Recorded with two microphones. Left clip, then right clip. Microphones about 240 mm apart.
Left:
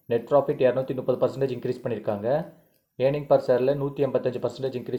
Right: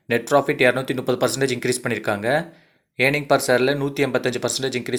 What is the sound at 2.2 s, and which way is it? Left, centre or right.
Speech, right.